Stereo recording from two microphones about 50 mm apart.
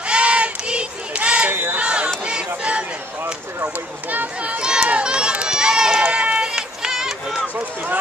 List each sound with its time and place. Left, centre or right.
0.0 s crowd: right
1.5 s a sound: right
1.8 s crowd: right
2.2 s a sound: right
3.6 s run: right; by 7.4 s centre
7.5 s run: right